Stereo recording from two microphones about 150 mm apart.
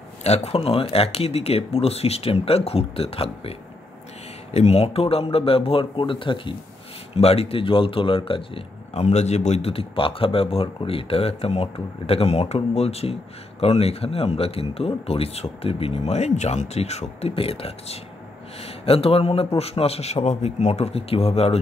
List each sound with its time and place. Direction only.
0.2 s speech: 45° left (ahead or behind)
4.6 s speech: 45° left (ahead or behind)